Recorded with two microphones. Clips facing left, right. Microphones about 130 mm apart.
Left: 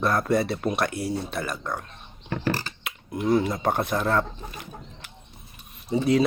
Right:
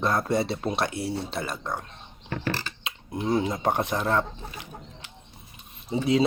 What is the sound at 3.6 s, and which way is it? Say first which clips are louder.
Speech: left 1 dB; 15° right (ahead or behind).